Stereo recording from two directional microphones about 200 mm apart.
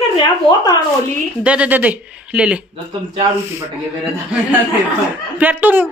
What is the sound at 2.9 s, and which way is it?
Speech, 20° right (ahead or behind).